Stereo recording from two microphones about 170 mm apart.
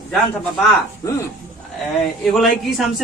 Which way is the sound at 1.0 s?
15° left (ahead or behind).